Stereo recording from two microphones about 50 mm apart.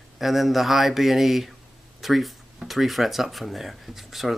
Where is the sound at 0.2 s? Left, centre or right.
Centre.